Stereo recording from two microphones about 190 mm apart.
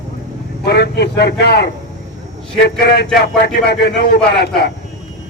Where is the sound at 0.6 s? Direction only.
60° left (ahead or behind).